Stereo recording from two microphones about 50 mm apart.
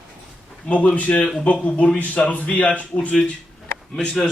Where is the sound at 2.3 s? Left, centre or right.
Left.